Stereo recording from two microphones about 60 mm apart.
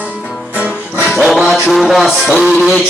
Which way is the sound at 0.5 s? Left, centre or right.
Right.